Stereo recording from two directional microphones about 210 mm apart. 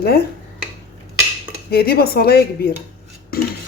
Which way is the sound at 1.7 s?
45° left (ahead or behind).